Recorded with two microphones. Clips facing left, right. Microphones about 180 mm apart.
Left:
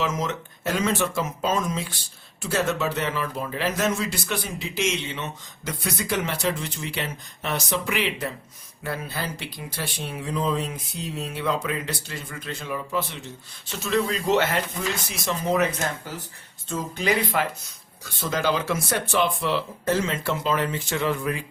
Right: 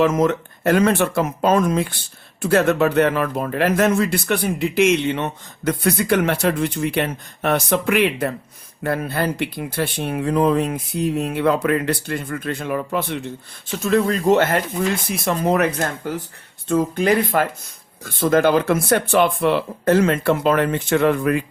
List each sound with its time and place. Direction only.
0.0 s speech: 55° right (ahead or behind)